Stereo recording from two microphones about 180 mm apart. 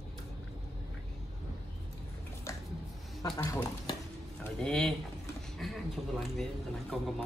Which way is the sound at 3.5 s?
15° left (ahead or behind).